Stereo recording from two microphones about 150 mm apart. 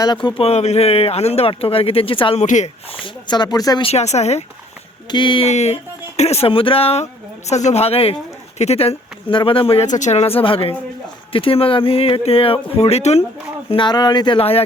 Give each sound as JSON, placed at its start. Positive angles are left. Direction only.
{"t": 0.0, "sound": "speech", "side_deg": 30}
{"t": 3.0, "sound": "speech", "side_deg": 30}
{"t": 3.8, "sound": "speech", "side_deg": 45}
{"t": 5.1, "sound": "speech", "side_deg": 35}
{"t": 5.5, "sound": "speech", "side_deg": 45}
{"t": 9.8, "sound": "speech", "side_deg": 55}
{"t": 13.7, "sound": "speech", "side_deg": 35}